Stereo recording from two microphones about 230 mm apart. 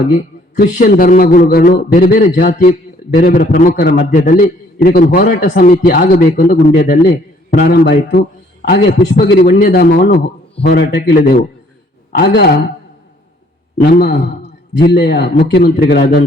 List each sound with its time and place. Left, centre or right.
0.6 s a man's voice: left
13.9 s a man's voice: left